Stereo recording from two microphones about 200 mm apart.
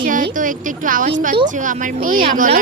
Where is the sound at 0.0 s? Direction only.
40° right (ahead or behind).